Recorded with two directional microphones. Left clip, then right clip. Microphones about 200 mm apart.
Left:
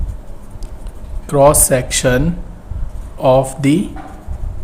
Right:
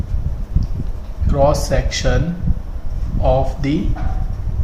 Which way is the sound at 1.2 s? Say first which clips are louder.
Left 6 dB; 50° left (ahead or behind).